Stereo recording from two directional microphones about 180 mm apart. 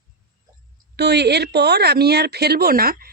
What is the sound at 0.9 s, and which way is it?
Speech, 70° right (ahead or behind).